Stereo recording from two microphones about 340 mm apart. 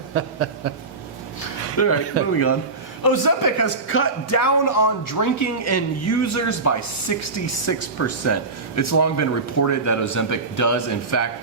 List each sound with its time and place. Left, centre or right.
0.1 s a sound: right
1.8 s speech: left
2.2 s a man's voice: right
3.0 s a man's voice: left
3.6 s a man's voice: left